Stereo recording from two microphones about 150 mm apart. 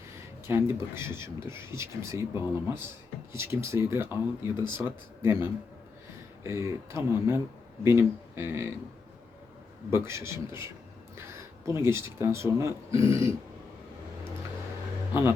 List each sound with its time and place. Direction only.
0.4 s speech: 15° right (ahead or behind)
3.3 s speech: 15° right (ahead or behind)
9.9 s speech: 20° right (ahead or behind)
15.1 s a man's voice: 15° right (ahead or behind)